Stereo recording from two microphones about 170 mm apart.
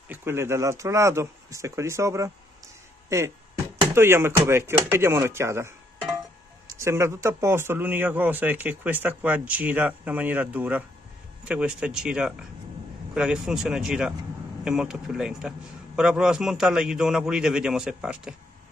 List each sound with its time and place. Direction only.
0.1 s a man's voice: 15° right (ahead or behind)